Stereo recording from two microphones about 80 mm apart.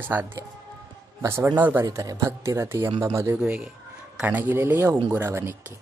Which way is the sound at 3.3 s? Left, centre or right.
Centre.